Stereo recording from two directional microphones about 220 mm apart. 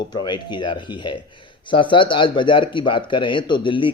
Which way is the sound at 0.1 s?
20° left (ahead or behind).